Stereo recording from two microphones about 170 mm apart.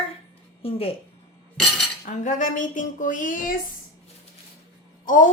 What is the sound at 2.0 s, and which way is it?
Speech, 45° left (ahead or behind).